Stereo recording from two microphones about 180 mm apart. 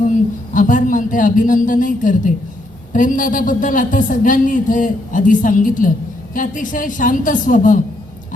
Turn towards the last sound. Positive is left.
turn(degrees=45)  # may be behind; listen again after turning